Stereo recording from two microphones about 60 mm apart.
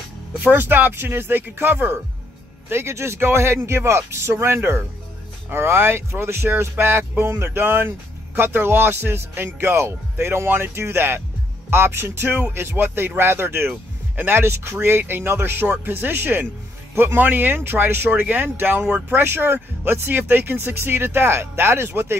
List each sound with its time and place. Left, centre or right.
0.4 s speech: right
2.7 s speech: right